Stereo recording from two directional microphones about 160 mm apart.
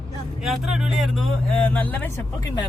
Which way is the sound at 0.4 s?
Centre (ahead or behind).